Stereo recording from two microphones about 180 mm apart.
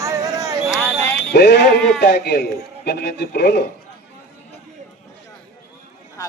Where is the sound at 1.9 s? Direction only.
65° left (ahead or behind).